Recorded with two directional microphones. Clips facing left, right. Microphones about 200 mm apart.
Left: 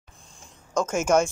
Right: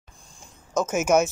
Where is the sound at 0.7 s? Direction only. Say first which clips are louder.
Right 1 dB; 5° right (ahead or behind).